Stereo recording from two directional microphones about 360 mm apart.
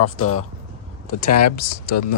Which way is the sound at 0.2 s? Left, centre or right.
Left.